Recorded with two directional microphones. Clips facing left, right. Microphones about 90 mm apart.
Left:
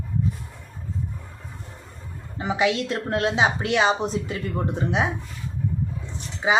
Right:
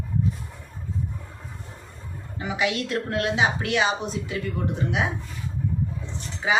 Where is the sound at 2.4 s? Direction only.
25° left (ahead or behind).